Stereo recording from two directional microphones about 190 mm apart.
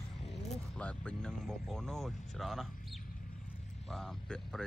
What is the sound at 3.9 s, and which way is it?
Speech, centre (ahead or behind).